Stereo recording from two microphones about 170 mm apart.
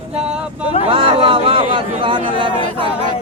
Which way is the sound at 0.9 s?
30° right (ahead or behind).